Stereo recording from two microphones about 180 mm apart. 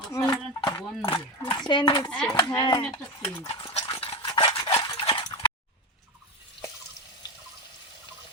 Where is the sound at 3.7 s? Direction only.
35° left (ahead or behind).